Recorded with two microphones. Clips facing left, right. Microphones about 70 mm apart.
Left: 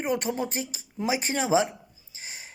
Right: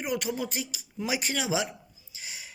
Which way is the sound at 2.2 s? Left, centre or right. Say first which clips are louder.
Left 1 dB; left.